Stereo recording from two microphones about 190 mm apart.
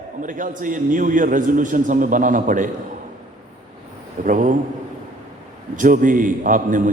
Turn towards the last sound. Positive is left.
turn(degrees=-45)  # may be behind; listen again after turning